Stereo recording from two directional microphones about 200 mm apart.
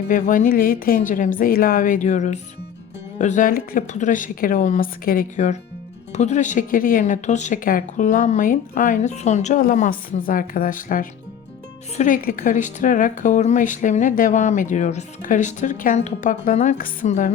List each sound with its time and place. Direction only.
0.1 s speech: 40° left (ahead or behind)